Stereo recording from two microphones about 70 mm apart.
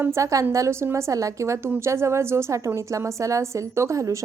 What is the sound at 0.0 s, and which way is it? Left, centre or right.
A woman's voice, right.